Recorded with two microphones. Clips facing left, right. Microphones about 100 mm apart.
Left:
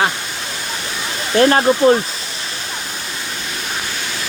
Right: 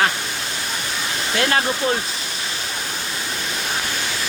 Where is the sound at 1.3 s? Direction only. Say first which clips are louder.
Left 9 dB; 35° left (ahead or behind).